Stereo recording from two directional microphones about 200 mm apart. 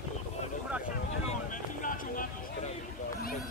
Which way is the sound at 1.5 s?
40° left (ahead or behind).